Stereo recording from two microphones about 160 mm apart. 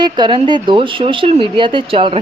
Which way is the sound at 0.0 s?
30° right (ahead or behind).